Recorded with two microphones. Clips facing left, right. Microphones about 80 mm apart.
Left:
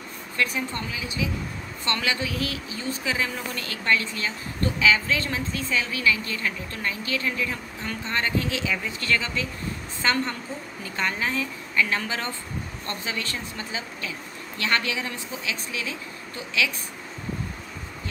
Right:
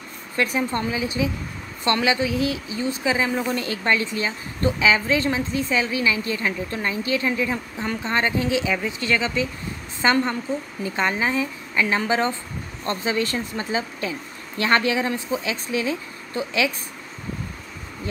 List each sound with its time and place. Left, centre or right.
0.4 s a woman's voice: right
1.9 s a woman's voice: centre